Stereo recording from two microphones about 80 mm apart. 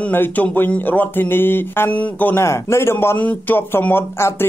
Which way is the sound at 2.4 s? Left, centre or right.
Left.